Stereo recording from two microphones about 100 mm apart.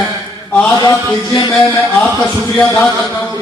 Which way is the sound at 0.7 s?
45° left (ahead or behind).